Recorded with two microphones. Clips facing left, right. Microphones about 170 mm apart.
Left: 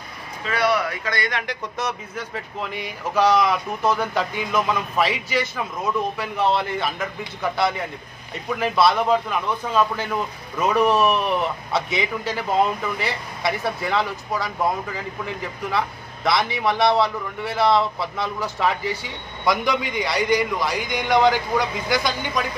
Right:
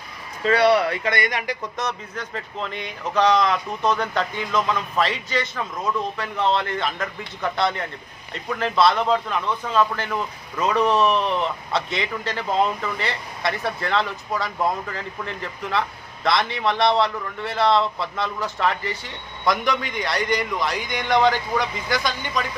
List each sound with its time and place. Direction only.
0.4 s speech: 30° right (ahead or behind); by 1.6 s 10° right (ahead or behind)
1.8 s speech: 5° left (ahead or behind)